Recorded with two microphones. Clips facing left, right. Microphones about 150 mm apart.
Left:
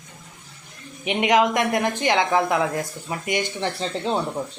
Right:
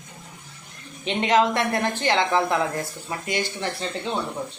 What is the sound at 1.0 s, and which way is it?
Speech, 15° left (ahead or behind).